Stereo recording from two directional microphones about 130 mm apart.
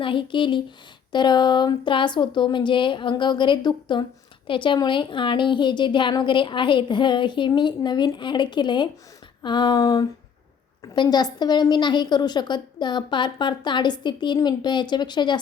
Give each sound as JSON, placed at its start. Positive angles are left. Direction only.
{"t": 0.0, "sound": "a woman's voice", "side_deg": 40}